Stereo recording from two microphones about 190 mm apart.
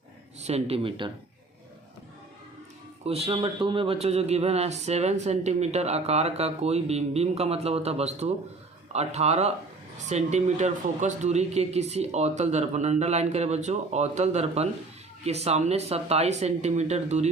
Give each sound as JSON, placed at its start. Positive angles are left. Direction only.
{"t": 0.4, "sound": "speech", "side_deg": -30}
{"t": 3.0, "sound": "speech", "side_deg": -35}